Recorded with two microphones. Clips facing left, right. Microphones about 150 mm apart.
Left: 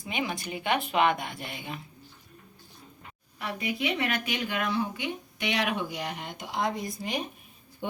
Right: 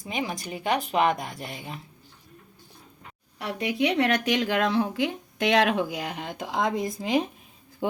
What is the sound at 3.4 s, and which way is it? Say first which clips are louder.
Speech: right 5 dB; 70° right (ahead or behind).